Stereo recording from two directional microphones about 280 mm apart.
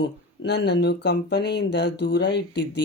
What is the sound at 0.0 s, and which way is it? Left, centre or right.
Speech, left.